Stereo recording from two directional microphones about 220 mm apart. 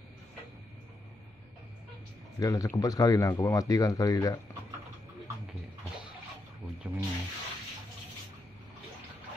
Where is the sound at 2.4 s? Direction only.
15° left (ahead or behind).